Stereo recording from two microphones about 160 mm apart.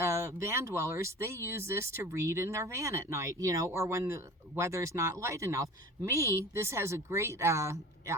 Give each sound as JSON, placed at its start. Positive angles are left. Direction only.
{"t": 0.0, "sound": "speech", "side_deg": -15}